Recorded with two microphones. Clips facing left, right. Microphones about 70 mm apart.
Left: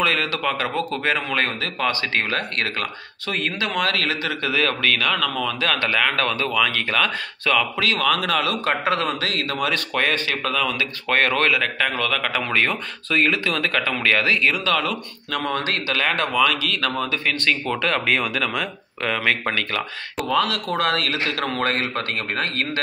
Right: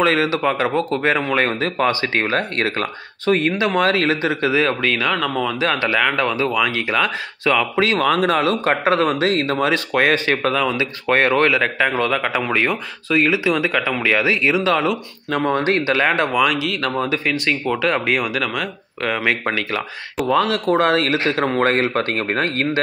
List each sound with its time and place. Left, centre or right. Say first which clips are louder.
0.0 s speech: right 5 dB; centre
7.7 s speech: right 4 dB; right
12.4 s speech: right 2 dB; centre
20.2 s speech: right 5 dB; right